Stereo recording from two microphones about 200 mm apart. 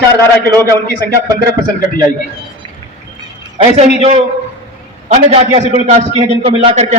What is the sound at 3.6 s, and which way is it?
A man's voice, 30° right (ahead or behind).